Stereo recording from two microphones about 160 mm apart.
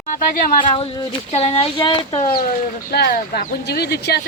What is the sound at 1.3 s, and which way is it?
Speech, 40° left (ahead or behind).